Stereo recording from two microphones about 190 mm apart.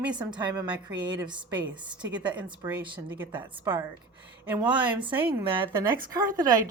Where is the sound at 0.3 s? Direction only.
20° right (ahead or behind).